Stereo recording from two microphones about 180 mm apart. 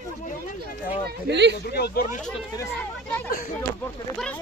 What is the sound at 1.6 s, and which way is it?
Speech, 60° left (ahead or behind).